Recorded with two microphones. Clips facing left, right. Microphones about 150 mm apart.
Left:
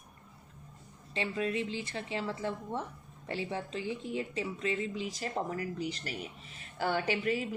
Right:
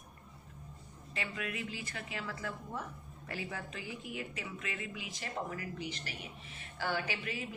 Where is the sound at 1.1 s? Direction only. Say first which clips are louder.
Left 7 dB; 30° left (ahead or behind).